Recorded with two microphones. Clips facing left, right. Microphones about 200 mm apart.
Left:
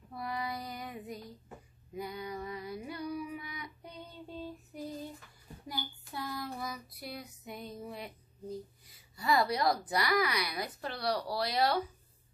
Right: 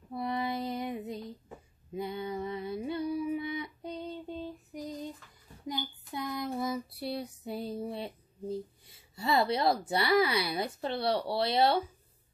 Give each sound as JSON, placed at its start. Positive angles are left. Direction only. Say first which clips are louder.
{"t": 0.1, "sound": "female singing", "louder": "right 5 dB", "side_deg": -25}
{"t": 2.0, "sound": "a sound", "louder": "right 4 dB", "side_deg": -25}
{"t": 5.7, "sound": "child singing", "louder": "right 5 dB", "side_deg": -20}